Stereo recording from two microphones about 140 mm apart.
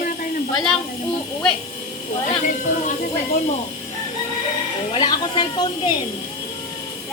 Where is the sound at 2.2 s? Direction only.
70° left (ahead or behind).